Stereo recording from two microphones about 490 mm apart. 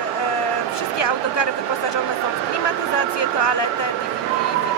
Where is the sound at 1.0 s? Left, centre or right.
Left.